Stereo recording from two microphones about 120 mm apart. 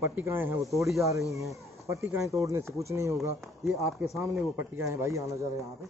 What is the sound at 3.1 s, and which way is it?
Speech, centre (ahead or behind).